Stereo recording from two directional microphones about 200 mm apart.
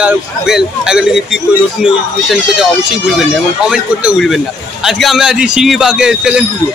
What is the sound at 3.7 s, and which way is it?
A man's voice, 5° right (ahead or behind).